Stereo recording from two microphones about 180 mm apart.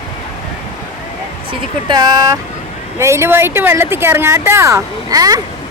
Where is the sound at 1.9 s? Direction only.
20° right (ahead or behind).